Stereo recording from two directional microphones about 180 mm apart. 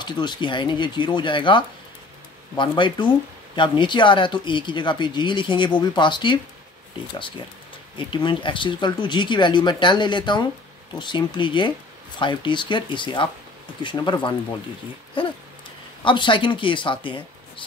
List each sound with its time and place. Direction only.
0.0 s speech: 25° left (ahead or behind)
15.2 s a sound: 30° left (ahead or behind)
16.0 s speech: 25° left (ahead or behind)